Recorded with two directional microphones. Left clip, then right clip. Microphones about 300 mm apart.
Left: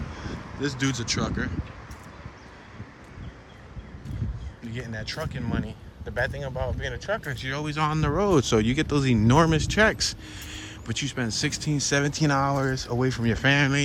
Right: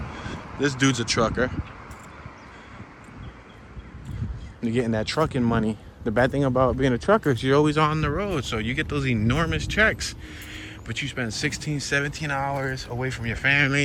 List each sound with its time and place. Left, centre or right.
0.6 s speech: centre
4.6 s speech: centre
6.4 s speech: right
7.0 s speech: centre